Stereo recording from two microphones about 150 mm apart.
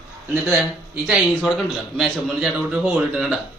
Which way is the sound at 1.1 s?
Centre (ahead or behind).